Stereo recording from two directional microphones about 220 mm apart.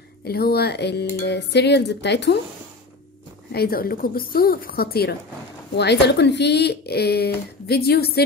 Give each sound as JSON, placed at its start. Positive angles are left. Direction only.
{"t": 0.2, "sound": "speech", "side_deg": 45}
{"t": 3.5, "sound": "speech", "side_deg": 45}